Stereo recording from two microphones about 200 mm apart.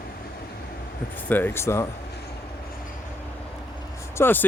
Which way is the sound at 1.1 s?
10° left (ahead or behind).